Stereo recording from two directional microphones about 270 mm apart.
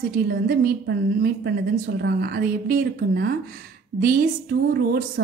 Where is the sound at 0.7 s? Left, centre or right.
Right.